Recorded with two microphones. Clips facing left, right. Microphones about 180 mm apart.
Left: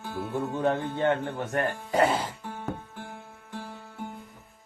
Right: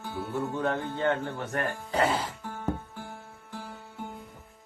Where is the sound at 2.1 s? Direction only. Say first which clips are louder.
Left 1 dB; 15° left (ahead or behind).